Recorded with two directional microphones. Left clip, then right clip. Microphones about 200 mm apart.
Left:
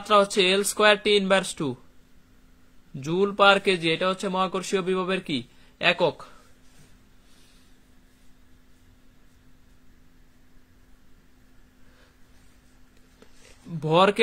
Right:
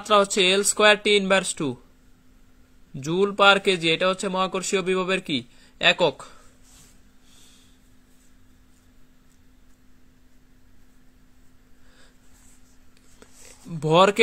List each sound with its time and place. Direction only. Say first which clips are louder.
0.0 s speech: right 1 dB; 20° right (ahead or behind)
2.9 s speech: right 2 dB; 20° right (ahead or behind)
13.7 s speech: right 2 dB; 20° right (ahead or behind)